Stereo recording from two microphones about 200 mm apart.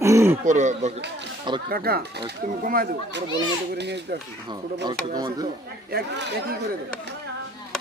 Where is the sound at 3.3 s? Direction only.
60° right (ahead or behind).